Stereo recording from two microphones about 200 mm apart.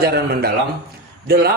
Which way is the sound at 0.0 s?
50° right (ahead or behind).